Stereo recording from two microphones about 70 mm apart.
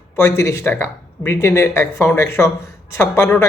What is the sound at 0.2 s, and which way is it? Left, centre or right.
A man's voice, left.